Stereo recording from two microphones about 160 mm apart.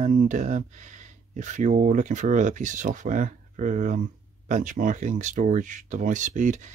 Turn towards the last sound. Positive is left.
turn(degrees=-50)  # may be behind; listen again after turning